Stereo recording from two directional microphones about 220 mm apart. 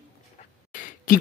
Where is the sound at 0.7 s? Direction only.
35° left (ahead or behind).